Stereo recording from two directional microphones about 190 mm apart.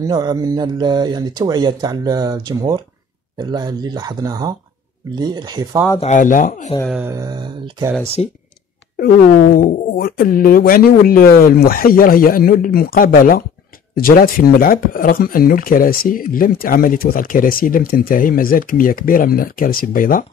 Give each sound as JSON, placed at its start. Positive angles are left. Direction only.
{"t": 0.0, "sound": "speech", "side_deg": -20}
{"t": 5.9, "sound": "speech", "side_deg": 40}
{"t": 7.1, "sound": "speech", "side_deg": -20}
{"t": 8.0, "sound": "speech", "side_deg": 30}
{"t": 8.9, "sound": "speech", "side_deg": 50}